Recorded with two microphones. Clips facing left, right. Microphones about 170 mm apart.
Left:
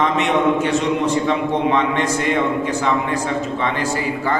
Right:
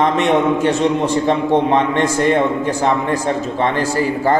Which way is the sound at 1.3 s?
40° right (ahead or behind).